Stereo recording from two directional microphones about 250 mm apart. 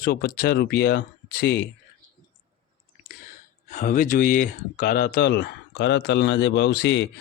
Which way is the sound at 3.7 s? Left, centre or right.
Left.